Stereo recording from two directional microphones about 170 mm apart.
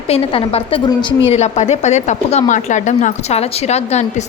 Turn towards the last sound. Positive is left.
turn(degrees=40)  # may be behind; listen again after turning